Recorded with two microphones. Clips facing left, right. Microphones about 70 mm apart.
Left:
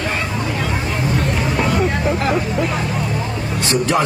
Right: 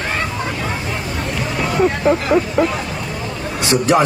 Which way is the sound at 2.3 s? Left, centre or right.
Right.